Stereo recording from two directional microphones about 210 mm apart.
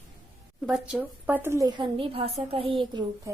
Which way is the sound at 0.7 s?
5° right (ahead or behind).